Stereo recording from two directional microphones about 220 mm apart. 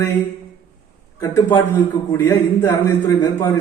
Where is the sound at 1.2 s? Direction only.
15° left (ahead or behind).